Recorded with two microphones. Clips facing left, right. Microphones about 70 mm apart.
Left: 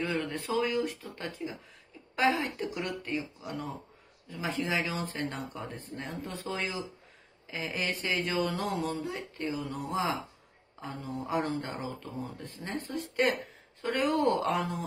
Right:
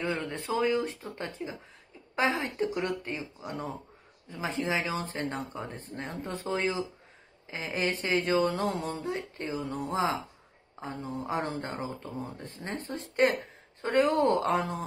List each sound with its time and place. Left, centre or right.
0.0 s speech: right